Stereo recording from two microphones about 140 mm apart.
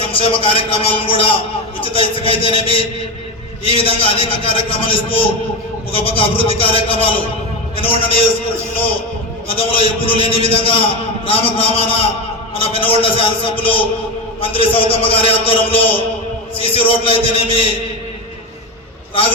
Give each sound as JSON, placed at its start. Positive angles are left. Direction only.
{"t": 0.0, "sound": "a man's voice", "side_deg": 40}
{"t": 9.5, "sound": "a man's voice", "side_deg": 40}